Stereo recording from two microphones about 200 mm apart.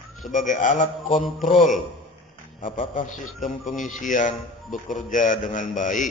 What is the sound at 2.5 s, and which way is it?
Speech, 25° left (ahead or behind).